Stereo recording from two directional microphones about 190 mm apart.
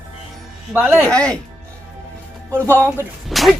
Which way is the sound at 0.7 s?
10° right (ahead or behind).